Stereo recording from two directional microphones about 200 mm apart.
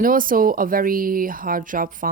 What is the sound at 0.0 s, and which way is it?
A woman's voice, 45° right (ahead or behind).